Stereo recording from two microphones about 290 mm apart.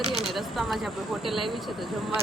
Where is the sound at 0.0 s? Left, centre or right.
Centre.